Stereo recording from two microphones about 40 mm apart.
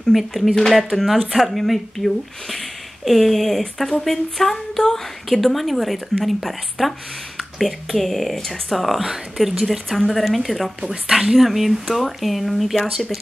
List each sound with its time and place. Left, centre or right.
0.1 s a woman's voice: centre
10.9 s a woman's voice: centre